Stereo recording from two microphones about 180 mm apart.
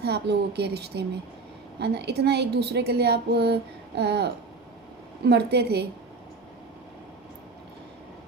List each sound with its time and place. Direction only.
0.0 s a woman's voice: 65° right (ahead or behind)